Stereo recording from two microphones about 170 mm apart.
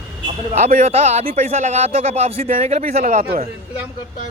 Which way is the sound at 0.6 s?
60° right (ahead or behind).